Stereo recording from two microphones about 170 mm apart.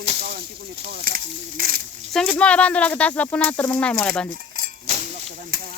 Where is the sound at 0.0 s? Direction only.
40° right (ahead or behind).